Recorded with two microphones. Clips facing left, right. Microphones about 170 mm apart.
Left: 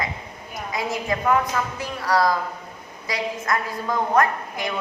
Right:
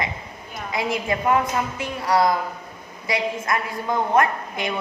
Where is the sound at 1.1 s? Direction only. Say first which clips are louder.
Left 1 dB; 20° right (ahead or behind).